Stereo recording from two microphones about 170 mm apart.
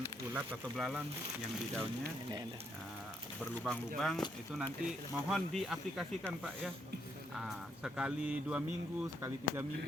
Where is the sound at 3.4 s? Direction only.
10° left (ahead or behind).